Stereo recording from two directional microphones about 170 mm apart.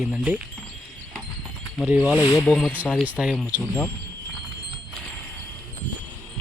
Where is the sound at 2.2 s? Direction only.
20° left (ahead or behind).